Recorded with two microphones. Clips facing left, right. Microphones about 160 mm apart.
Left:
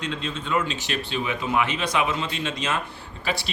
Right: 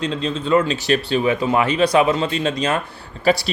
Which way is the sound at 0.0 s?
35° right (ahead or behind).